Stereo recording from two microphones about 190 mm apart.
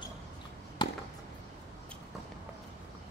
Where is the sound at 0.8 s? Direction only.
25° left (ahead or behind).